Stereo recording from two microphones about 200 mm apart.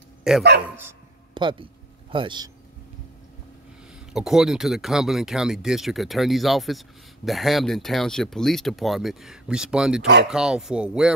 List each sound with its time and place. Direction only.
0.3 s speech: 5° right (ahead or behind)
1.3 s speech: 25° right (ahead or behind)
4.1 s speech: centre (ahead or behind)